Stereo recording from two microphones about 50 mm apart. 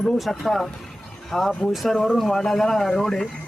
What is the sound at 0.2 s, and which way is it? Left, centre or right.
Speech, centre.